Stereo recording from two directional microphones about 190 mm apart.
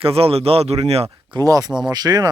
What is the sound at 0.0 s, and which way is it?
Speech, 30° right (ahead or behind).